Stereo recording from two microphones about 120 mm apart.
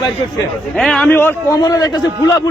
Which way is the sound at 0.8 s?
5° left (ahead or behind).